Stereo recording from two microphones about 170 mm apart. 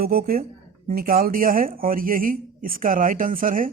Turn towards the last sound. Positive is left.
turn(degrees=-55)  # may be behind; listen again after turning